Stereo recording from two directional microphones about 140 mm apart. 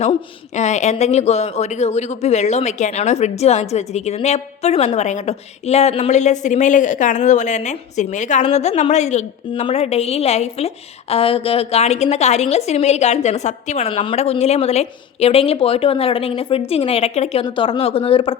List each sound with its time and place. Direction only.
0.0 s speech: 50° left (ahead or behind)
17.4 s speech: 35° left (ahead or behind)